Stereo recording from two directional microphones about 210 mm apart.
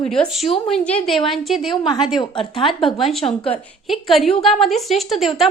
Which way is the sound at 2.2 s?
25° left (ahead or behind).